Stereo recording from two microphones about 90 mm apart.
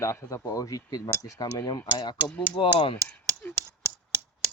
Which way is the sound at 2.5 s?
70° left (ahead or behind).